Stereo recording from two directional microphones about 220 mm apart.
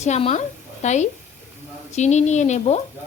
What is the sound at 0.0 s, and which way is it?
Speech, 30° left (ahead or behind).